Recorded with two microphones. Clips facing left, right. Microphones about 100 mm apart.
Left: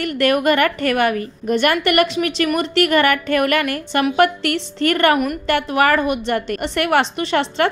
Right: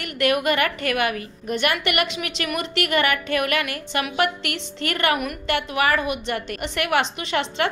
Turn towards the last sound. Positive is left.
turn(degrees=40)  # may be behind; listen again after turning